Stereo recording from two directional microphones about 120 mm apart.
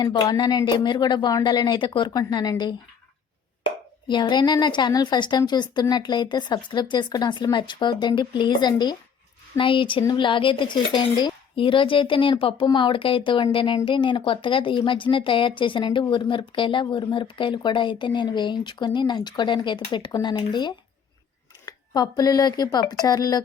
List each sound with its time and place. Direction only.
0.0 s speech: 35° left (ahead or behind)
4.1 s speech: 40° left (ahead or behind)